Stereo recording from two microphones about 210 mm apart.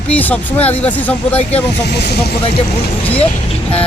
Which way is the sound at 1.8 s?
50° left (ahead or behind).